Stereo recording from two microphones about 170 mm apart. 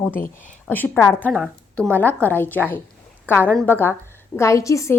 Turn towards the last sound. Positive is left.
turn(degrees=20)  # may be behind; listen again after turning